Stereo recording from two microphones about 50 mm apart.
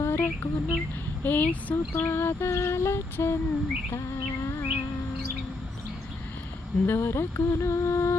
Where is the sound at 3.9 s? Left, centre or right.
Left.